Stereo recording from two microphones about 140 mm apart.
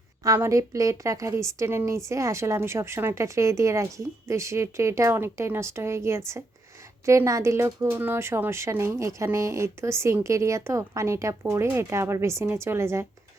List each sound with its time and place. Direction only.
0.2 s a woman's voice: 20° right (ahead or behind)